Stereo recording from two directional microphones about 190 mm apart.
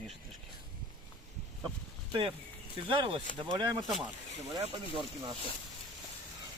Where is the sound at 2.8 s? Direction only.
25° right (ahead or behind).